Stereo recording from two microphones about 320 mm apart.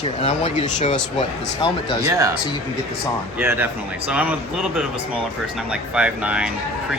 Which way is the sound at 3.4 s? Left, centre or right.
Centre.